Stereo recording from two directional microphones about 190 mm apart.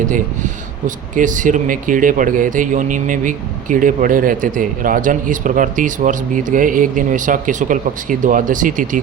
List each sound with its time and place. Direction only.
0.1 s speech: 40° right (ahead or behind)